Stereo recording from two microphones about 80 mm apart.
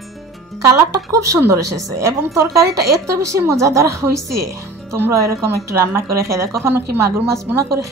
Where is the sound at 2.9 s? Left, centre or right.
Right.